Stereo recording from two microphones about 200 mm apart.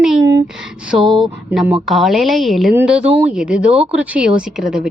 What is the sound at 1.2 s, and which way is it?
A woman's voice, 5° right (ahead or behind).